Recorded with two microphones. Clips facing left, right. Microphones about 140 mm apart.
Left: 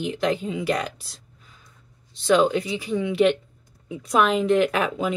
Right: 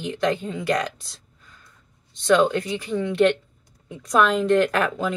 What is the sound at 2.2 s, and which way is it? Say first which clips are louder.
Speech: even; 5° left (ahead or behind).